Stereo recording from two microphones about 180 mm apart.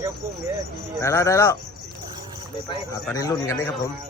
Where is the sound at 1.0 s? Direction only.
15° left (ahead or behind).